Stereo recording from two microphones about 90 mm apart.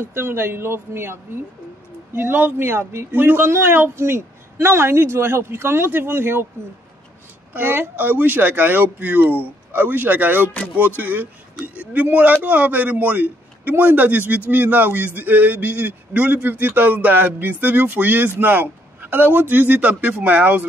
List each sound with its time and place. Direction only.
0.0 s speech: 25° right (ahead or behind)
7.5 s speech: 20° right (ahead or behind)